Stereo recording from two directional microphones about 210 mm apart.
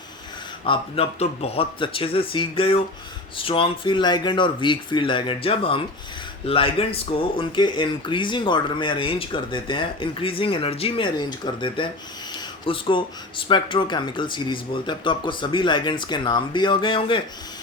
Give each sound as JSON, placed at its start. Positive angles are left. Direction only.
{"t": 0.6, "sound": "speech", "side_deg": 25}